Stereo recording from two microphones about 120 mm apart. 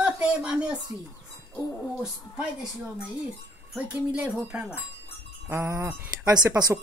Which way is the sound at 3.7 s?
10° right (ahead or behind).